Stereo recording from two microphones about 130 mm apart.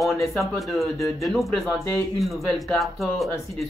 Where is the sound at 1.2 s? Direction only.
Centre (ahead or behind).